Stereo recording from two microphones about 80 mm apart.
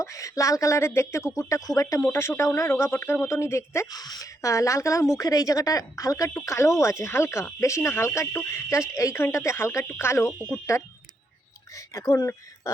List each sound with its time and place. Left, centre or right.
0.0 s a woman's voice: left
2.1 s a woman's voice: left
3.9 s a woman's voice: left
11.9 s speech: left